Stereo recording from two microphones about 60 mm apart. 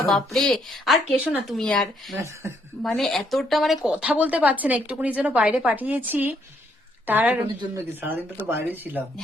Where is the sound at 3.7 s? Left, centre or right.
Centre.